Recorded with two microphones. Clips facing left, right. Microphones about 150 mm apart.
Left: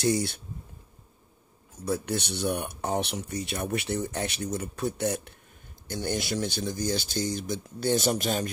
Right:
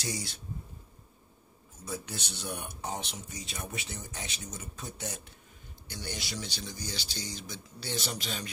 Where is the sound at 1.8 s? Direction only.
60° left (ahead or behind).